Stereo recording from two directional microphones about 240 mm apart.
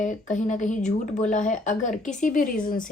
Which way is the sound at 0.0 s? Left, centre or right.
Left.